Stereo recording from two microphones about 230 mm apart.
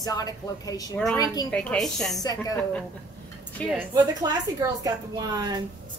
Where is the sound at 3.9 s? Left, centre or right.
Centre.